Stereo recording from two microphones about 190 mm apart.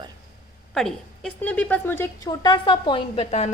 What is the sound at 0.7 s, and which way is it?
A woman's voice, 5° left (ahead or behind).